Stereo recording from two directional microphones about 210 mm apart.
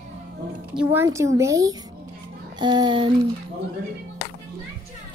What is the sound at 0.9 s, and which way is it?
A child's voice, 15° right (ahead or behind).